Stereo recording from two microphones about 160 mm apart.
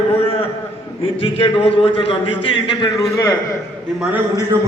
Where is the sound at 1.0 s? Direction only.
35° left (ahead or behind).